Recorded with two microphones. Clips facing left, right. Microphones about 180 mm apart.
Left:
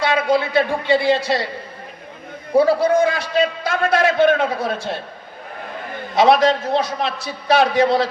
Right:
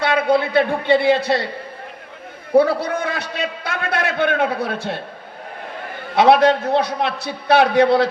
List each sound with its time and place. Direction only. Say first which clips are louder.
0.3 s a man's voice: right 2 dB; 60° right (ahead or behind)
2.6 s a man's voice: left 2 dB; 60° right (ahead or behind)
6.1 s a man's voice: right 1 dB; 60° right (ahead or behind)